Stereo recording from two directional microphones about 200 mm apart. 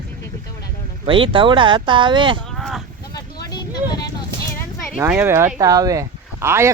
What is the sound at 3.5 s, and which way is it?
Vehicle, 20° left (ahead or behind).